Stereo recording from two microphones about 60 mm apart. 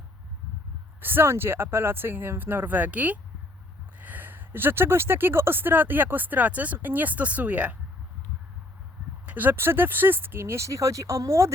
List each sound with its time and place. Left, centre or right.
1.0 s speech: right
9.2 s speech: right